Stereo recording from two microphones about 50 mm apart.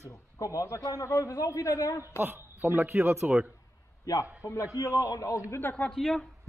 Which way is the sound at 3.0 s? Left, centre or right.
Right.